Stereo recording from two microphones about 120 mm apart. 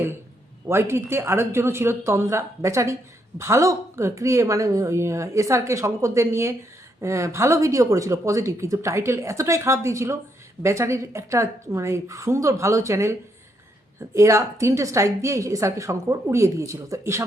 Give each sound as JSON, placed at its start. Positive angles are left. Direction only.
{"t": 0.7, "sound": "speech", "side_deg": -20}